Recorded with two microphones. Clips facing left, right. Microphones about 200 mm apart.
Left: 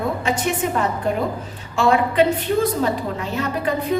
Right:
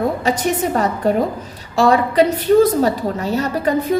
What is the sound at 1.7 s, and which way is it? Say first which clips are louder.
A woman's voice: right 3 dB; 40° right (ahead or behind).